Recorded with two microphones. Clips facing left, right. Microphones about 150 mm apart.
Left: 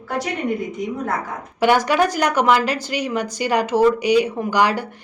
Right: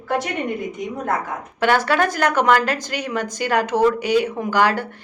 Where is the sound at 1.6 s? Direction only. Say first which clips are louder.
Left 2 dB; 15° left (ahead or behind).